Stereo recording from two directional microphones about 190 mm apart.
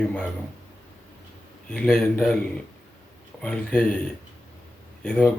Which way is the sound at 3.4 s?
5° left (ahead or behind).